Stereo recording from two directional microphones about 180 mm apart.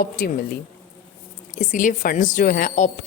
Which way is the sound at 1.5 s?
45° left (ahead or behind).